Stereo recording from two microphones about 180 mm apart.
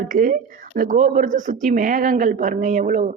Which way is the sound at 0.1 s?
50° right (ahead or behind).